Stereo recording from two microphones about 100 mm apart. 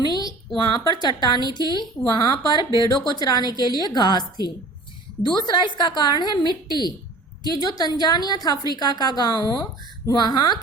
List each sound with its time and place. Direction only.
0.5 s a woman's voice: 50° left (ahead or behind)